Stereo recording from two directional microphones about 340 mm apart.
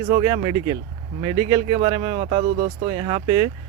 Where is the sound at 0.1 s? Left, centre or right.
Centre.